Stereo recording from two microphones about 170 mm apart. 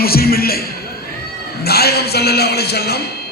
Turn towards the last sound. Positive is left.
turn(degrees=70)  # may be behind; listen again after turning